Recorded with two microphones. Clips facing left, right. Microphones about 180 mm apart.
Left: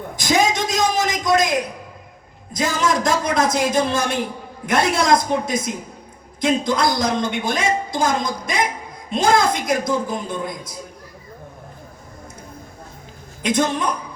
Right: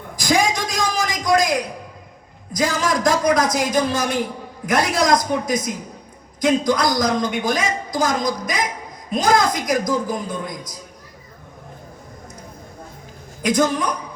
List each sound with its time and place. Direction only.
0.2 s a sound: 25° left (ahead or behind)
2.5 s a woman's voice: 25° left (ahead or behind)
13.4 s a woman's voice: 25° left (ahead or behind)